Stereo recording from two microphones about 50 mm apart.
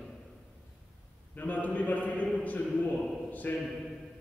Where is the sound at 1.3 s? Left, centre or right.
Left.